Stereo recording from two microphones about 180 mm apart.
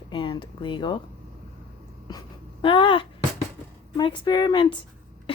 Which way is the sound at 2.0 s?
25° left (ahead or behind).